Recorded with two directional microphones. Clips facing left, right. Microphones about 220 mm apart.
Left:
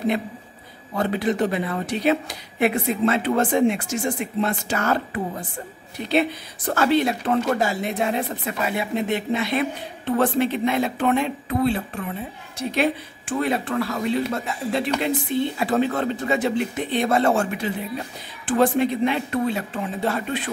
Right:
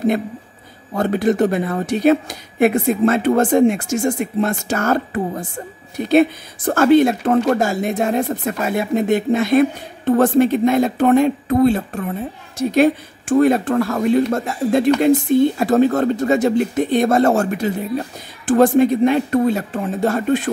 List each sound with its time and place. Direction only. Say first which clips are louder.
0.9 s speech: right 6 dB; 45° right (ahead or behind)